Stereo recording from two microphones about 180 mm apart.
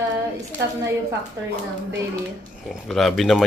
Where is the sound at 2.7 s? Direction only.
Centre (ahead or behind).